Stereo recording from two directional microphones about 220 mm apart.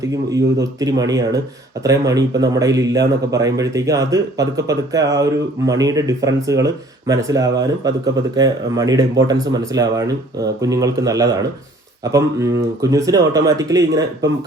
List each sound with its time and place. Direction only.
0.0 s speech: 15° right (ahead or behind)